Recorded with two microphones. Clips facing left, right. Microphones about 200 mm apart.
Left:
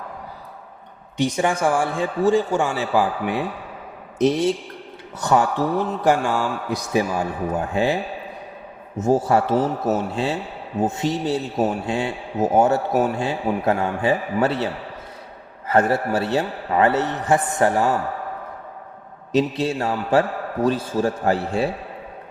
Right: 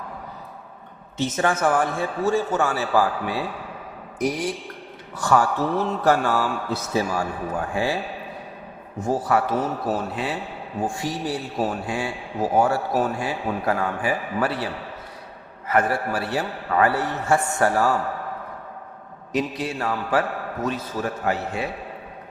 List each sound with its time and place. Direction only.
1.1 s a man's voice: 15° left (ahead or behind)
9.0 s a man's voice: 25° left (ahead or behind)
19.3 s a man's voice: 25° left (ahead or behind)